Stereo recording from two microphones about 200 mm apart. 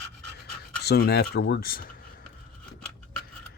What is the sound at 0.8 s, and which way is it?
Speech, 55° left (ahead or behind).